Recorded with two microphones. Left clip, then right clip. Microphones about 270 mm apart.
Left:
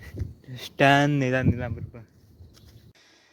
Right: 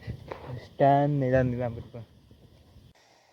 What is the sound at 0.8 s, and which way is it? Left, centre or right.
Speech, left.